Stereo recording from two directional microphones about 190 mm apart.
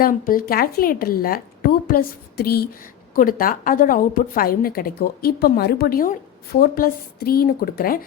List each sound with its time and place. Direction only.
0.0 s a woman's voice: 50° left (ahead or behind)